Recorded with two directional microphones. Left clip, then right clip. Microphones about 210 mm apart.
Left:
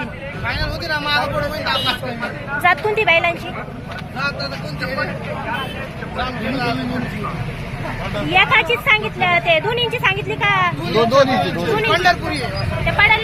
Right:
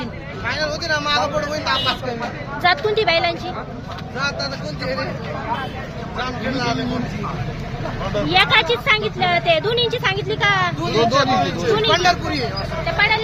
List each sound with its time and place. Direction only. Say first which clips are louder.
0.4 s speech: right 2 dB; 40° right (ahead or behind)
3.0 s a woman's voice: left 5 dB; 10° right (ahead or behind)
4.8 s speech: left 2 dB; 40° right (ahead or behind)
6.1 s speech: left 1 dB; 40° right (ahead or behind)
8.3 s a woman's voice: left 1 dB; 15° right (ahead or behind)
10.8 s speech: left 3 dB; 45° right (ahead or behind)
13.0 s speech: left 4 dB; centre (ahead or behind)